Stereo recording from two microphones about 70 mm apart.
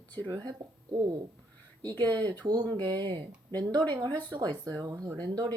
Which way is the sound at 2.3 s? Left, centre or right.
Right.